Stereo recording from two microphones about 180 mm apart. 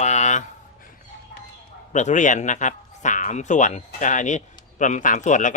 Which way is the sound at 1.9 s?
40° left (ahead or behind).